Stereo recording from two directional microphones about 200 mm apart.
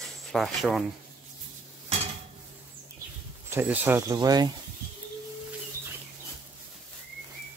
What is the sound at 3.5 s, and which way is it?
Speech, 10° right (ahead or behind).